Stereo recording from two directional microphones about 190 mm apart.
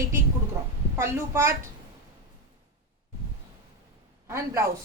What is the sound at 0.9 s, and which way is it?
Speech, 15° right (ahead or behind).